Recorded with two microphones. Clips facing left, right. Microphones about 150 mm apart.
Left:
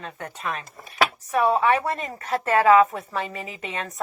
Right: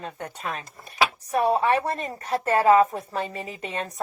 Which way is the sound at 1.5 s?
40° right (ahead or behind).